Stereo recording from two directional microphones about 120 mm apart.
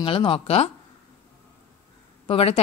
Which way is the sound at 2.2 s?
55° left (ahead or behind).